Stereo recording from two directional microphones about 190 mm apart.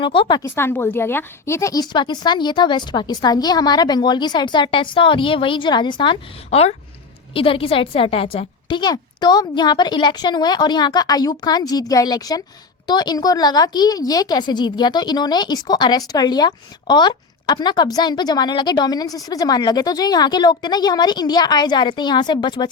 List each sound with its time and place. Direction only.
0.0 s a woman's voice: 25° left (ahead or behind)
0.4 s a woman's voice: 10° left (ahead or behind)